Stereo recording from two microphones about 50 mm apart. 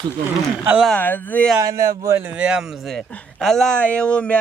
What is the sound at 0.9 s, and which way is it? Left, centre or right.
Speech, left.